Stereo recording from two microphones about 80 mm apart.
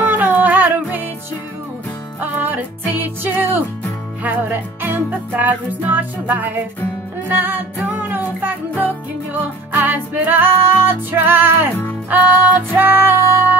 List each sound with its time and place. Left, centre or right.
0.0 s music: right
2.1 s music: right